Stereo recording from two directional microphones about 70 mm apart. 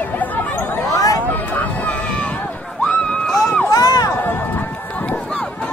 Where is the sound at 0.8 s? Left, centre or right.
Left.